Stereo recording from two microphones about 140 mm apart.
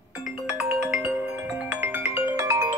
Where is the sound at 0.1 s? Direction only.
5° right (ahead or behind).